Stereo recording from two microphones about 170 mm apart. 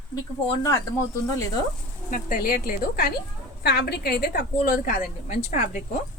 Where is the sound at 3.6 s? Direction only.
75° left (ahead or behind); by 5.8 s 50° left (ahead or behind).